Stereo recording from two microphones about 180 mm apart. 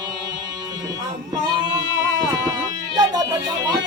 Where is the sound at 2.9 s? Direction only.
20° right (ahead or behind).